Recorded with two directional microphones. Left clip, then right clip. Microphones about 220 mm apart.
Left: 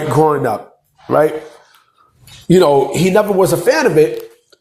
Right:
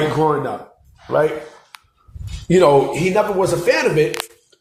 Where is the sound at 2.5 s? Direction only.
35° left (ahead or behind).